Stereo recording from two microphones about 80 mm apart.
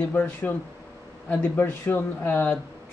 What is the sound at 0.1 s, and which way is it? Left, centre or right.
Speech, left.